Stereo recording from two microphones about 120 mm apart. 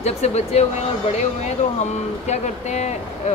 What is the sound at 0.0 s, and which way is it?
Speech, 65° left (ahead or behind).